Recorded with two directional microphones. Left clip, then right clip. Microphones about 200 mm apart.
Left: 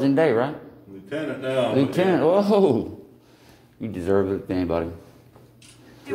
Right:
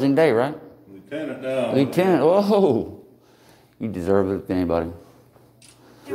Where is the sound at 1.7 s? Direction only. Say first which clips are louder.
Right 4 dB; 30° right (ahead or behind).